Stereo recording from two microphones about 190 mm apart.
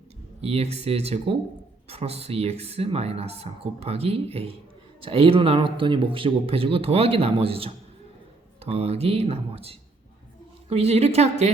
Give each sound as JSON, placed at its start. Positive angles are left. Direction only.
{"t": 0.4, "sound": "speech", "side_deg": -35}